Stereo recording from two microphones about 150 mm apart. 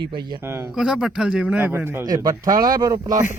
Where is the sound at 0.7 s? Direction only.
5° right (ahead or behind).